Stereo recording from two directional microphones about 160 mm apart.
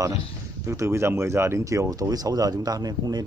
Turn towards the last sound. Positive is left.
turn(degrees=-25)  # may be behind; listen again after turning